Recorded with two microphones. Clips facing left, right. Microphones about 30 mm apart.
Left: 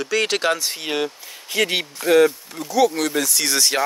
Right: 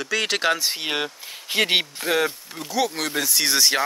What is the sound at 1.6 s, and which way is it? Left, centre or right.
Speech, right.